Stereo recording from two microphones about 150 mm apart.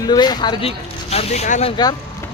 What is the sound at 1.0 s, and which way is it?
Speech, 45° left (ahead or behind).